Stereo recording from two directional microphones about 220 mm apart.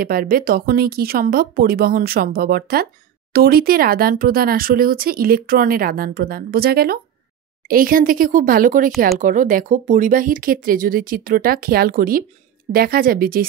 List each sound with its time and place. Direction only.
0.0 s speech: 40° right (ahead or behind)